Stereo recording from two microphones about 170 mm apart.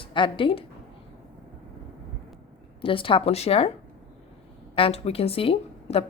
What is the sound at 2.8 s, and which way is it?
Speech, 30° left (ahead or behind).